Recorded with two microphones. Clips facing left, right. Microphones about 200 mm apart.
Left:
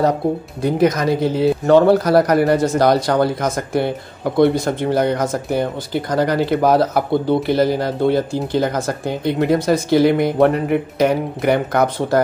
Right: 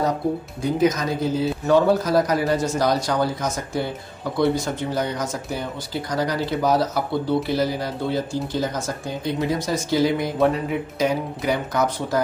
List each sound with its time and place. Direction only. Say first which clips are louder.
0.6 s speech: left 4 dB; 65° left (ahead or behind)